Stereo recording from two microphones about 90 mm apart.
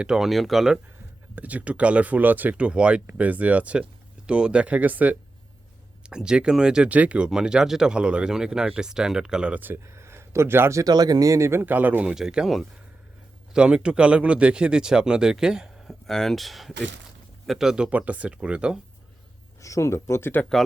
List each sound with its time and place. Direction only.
0.0 s speech: 5° right (ahead or behind)
1.4 s speech: 15° right (ahead or behind)
9.8 s speech: 30° right (ahead or behind)
11.6 s speech: 20° right (ahead or behind)
12.0 s speech: 5° right (ahead or behind)
16.0 s speech: 5° left (ahead or behind); by 18.8 s 10° right (ahead or behind)
19.6 s speech: 35° left (ahead or behind)